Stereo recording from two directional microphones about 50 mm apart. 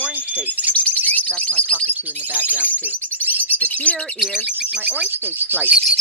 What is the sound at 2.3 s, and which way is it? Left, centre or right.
Speech, right.